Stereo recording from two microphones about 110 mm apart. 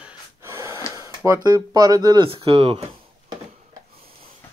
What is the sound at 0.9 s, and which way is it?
Speech, 25° right (ahead or behind).